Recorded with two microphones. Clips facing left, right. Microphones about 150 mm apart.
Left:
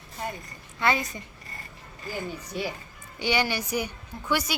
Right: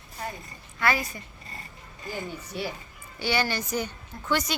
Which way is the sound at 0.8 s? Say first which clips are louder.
Left 1 dB; 20° left (ahead or behind).